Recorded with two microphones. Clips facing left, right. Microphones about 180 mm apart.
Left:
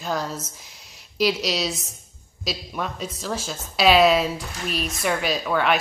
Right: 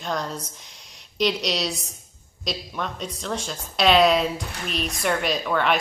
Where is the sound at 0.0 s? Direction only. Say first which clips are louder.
Left 1 dB; 5° left (ahead or behind).